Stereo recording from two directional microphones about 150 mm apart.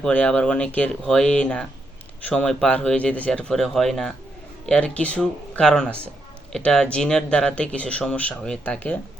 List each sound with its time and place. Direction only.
0.0 s speech: 5° left (ahead or behind)